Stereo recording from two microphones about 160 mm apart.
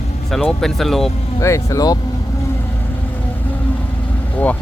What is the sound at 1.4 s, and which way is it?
Speech, 20° left (ahead or behind).